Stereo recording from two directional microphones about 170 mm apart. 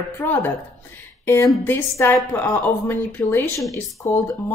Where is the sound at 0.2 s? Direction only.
10° left (ahead or behind).